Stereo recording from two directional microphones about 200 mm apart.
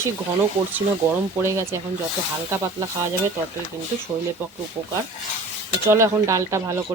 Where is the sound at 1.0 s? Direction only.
10° right (ahead or behind).